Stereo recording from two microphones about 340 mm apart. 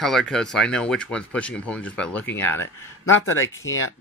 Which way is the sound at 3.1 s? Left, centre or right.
Left.